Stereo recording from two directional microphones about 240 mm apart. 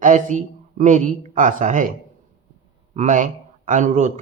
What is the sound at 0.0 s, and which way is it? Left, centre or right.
Speech, right.